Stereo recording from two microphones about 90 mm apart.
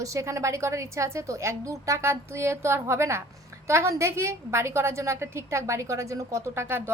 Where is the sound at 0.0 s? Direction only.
35° right (ahead or behind).